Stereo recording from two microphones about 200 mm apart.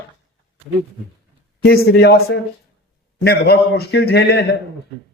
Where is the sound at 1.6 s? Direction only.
55° left (ahead or behind).